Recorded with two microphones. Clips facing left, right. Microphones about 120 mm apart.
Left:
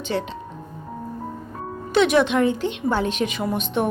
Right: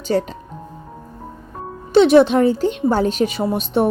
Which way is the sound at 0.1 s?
40° right (ahead or behind).